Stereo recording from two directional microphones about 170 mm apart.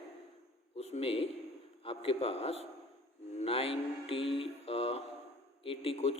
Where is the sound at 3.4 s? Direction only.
35° left (ahead or behind).